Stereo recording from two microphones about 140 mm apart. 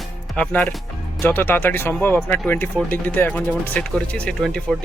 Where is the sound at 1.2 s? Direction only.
15° left (ahead or behind).